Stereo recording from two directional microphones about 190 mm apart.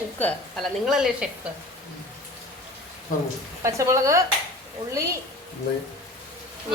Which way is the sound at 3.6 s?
15° right (ahead or behind).